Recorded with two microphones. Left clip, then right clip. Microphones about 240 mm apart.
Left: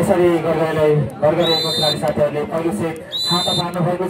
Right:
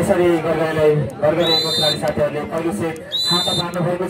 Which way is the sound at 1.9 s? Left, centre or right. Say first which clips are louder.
Left 2 dB; left.